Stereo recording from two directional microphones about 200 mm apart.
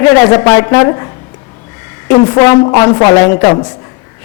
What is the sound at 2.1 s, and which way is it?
A woman's voice, 15° left (ahead or behind).